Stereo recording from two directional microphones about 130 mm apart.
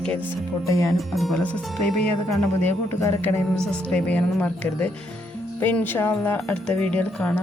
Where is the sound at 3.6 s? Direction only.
10° left (ahead or behind).